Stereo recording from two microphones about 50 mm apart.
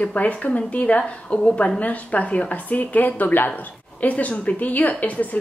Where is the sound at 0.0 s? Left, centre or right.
Left.